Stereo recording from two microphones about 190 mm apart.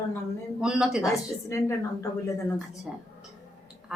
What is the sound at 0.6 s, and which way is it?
Speech, 5° right (ahead or behind).